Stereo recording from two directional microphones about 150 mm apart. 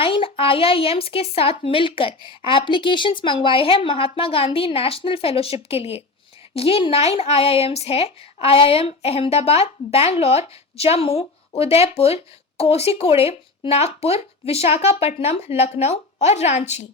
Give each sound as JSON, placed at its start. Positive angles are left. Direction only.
{"t": 0.0, "sound": "a woman's voice", "side_deg": 35}